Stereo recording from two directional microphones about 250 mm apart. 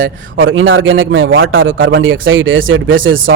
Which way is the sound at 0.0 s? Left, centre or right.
Right.